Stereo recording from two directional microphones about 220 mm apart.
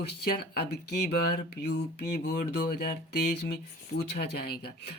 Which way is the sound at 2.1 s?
45° left (ahead or behind).